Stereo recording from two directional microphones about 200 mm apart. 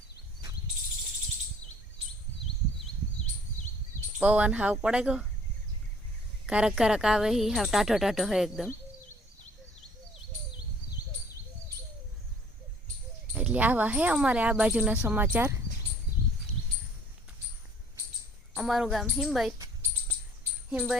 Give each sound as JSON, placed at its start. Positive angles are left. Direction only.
{"t": 4.2, "sound": "speech", "side_deg": -5}
{"t": 6.4, "sound": "a woman's voice", "side_deg": -5}
{"t": 13.3, "sound": "speech", "side_deg": -5}
{"t": 18.5, "sound": "a woman's voice", "side_deg": -5}
{"t": 20.7, "sound": "a woman's voice", "side_deg": -5}